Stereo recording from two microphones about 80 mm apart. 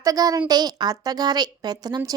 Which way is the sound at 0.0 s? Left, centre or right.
Right.